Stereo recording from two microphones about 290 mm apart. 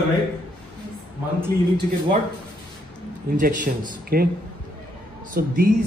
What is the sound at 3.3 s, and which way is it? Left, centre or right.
Speech, right.